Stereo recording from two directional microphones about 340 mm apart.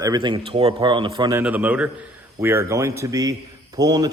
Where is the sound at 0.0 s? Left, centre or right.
Centre.